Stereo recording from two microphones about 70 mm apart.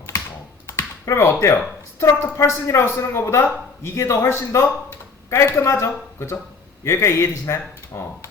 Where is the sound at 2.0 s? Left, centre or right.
Left.